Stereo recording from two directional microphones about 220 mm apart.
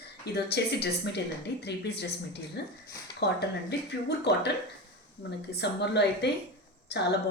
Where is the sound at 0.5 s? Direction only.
50° left (ahead or behind).